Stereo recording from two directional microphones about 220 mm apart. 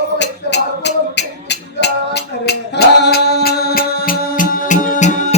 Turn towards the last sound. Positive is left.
turn(degrees=35)  # may be behind; listen again after turning